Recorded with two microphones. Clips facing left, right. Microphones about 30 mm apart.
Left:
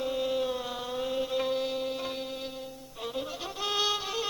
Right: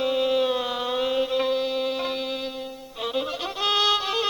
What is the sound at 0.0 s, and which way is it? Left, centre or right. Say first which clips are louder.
Music: right 7 dB; right.